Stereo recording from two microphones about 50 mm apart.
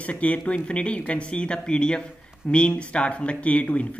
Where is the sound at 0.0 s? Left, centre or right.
Left.